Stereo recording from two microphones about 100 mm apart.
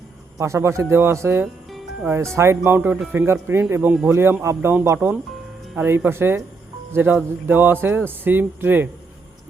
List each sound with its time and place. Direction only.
0.3 s speech: 30° right (ahead or behind)